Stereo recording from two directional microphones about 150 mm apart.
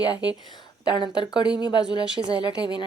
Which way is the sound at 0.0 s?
25° left (ahead or behind).